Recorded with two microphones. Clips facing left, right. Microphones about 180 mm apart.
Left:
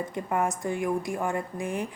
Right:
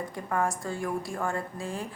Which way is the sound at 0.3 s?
20° left (ahead or behind).